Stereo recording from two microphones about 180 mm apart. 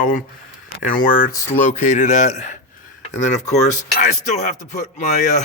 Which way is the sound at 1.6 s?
40° left (ahead or behind).